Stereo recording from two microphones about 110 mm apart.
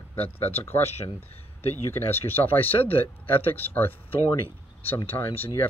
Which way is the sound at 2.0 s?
20° left (ahead or behind).